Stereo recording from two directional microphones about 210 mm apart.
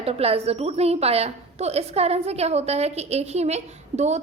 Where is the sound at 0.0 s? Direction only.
30° right (ahead or behind).